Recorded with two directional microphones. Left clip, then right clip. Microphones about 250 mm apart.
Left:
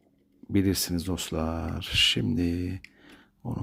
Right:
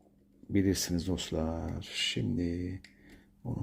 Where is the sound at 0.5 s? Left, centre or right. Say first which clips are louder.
Left 3 dB; centre.